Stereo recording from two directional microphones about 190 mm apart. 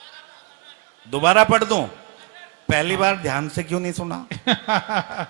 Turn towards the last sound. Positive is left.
turn(degrees=-15)  # may be behind; listen again after turning